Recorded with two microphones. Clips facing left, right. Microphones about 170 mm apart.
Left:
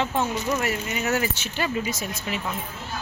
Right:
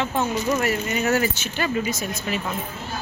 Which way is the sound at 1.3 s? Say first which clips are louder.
Right 2 dB; 30° left (ahead or behind).